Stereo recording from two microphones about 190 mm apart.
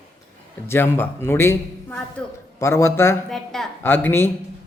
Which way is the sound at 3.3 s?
Centre (ahead or behind).